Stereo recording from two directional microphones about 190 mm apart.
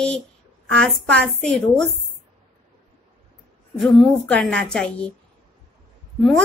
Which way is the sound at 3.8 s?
5° left (ahead or behind).